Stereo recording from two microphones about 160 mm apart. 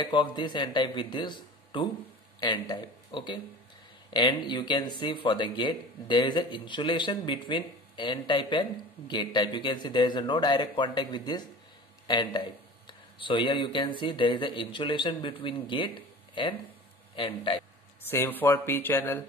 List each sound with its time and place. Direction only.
0.0 s a man's voice: 30° left (ahead or behind)
18.1 s speech: 15° left (ahead or behind)